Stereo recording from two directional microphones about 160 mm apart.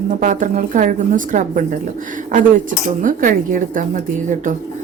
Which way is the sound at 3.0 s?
60° right (ahead or behind).